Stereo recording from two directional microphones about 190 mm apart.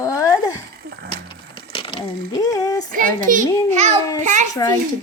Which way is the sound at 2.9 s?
45° right (ahead or behind).